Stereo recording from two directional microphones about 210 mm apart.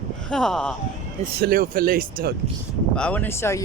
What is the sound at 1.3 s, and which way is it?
Speech, 45° right (ahead or behind).